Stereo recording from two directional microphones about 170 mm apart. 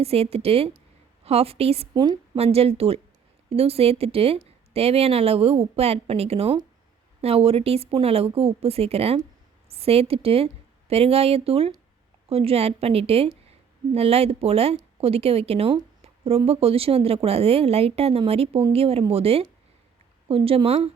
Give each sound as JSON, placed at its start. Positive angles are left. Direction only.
{"t": 0.0, "sound": "a woman's voice", "side_deg": -35}
{"t": 1.9, "sound": "a woman's voice", "side_deg": -25}